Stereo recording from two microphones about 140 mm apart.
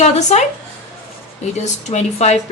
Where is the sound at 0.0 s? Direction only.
55° left (ahead or behind).